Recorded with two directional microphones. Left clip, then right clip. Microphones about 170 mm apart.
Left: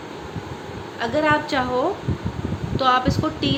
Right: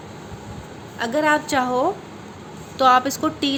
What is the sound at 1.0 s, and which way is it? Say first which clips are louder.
A woman's voice: even; 30° right (ahead or behind).